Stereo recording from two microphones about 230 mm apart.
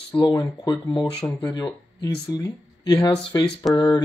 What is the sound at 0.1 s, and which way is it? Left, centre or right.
Speech, centre.